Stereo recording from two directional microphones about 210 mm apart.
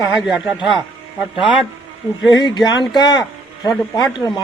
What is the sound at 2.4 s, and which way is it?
Speech, 20° left (ahead or behind).